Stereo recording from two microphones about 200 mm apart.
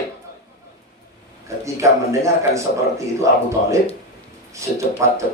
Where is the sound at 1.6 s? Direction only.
15° right (ahead or behind).